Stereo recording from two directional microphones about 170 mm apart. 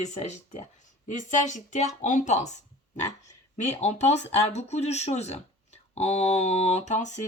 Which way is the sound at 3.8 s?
40° left (ahead or behind).